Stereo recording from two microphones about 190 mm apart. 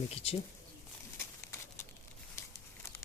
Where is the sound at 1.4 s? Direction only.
15° left (ahead or behind).